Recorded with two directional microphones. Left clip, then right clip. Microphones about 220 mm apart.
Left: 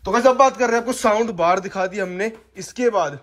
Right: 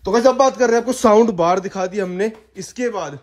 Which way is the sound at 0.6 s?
10° right (ahead or behind).